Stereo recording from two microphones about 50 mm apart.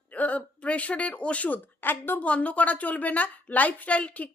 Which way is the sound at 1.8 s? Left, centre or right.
Left.